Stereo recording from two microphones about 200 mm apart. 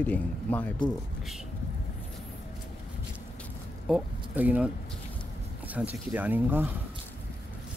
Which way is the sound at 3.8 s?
5° right (ahead or behind).